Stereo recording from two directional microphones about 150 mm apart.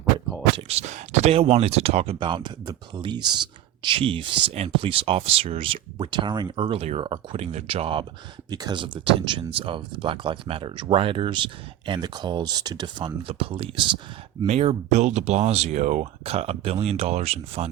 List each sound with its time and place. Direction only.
0.5 s speech: 45° right (ahead or behind)
2.1 s speech: 30° right (ahead or behind)
8.4 s speech: 25° right (ahead or behind)
14.4 s speech: 45° right (ahead or behind)